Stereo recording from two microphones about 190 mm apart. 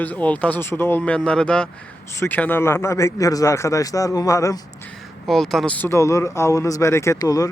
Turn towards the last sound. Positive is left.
turn(degrees=20)  # may be behind; listen again after turning